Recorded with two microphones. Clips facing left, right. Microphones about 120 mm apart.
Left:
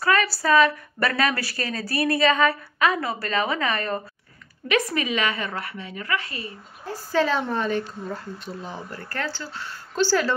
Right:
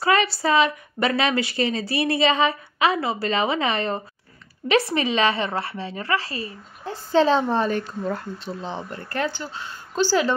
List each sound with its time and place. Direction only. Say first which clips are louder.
0.0 s a woman's voice: right 2 dB; 25° right (ahead or behind)